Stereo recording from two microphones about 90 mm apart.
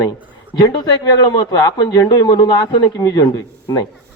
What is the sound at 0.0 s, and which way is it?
A man's voice, 45° left (ahead or behind).